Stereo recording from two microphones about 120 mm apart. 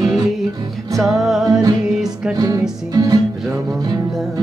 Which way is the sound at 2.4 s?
30° right (ahead or behind).